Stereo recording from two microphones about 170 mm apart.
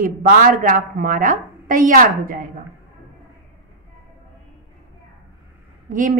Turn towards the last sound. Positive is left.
turn(degrees=-50)  # may be behind; listen again after turning